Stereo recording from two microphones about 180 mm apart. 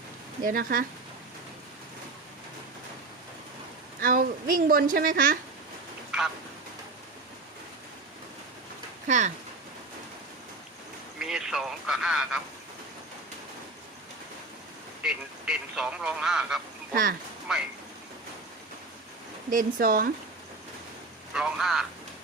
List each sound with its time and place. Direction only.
0.4 s speech: 50° right (ahead or behind)
4.0 s speech: 50° right (ahead or behind)
6.1 s a sound: 5° right (ahead or behind)
9.0 s speech: 45° right (ahead or behind)
11.2 s speech: 5° right (ahead or behind)
15.0 s speech: 5° right (ahead or behind)
16.9 s speech: 50° right (ahead or behind)
17.5 s speech: 5° right (ahead or behind)
19.5 s speech: 50° right (ahead or behind)
21.3 s speech: 5° right (ahead or behind)